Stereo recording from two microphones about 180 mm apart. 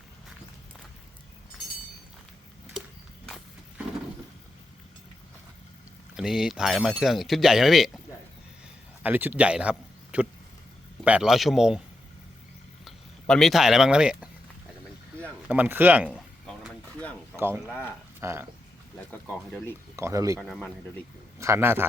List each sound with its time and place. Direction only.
6.1 s speech: centre (ahead or behind)
9.0 s speech: 10° right (ahead or behind)
12.8 s speech: centre (ahead or behind)
15.4 s speech: 10° right (ahead or behind)
16.1 s a sound: 5° left (ahead or behind)
17.3 s speech: 10° right (ahead or behind)
17.7 s speech: 10° left (ahead or behind)
18.2 s speech: 15° right (ahead or behind)
19.5 s speech: 10° left (ahead or behind)
20.0 s speech: 15° right (ahead or behind)
20.4 s speech: 5° left (ahead or behind)
21.3 s speech: 15° right (ahead or behind)